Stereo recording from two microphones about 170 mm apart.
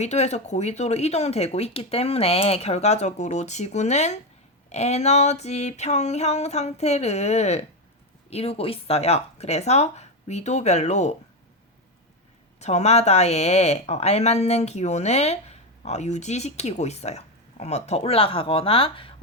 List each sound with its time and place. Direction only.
0.0 s speech: 40° left (ahead or behind)
12.5 s speech: 40° left (ahead or behind)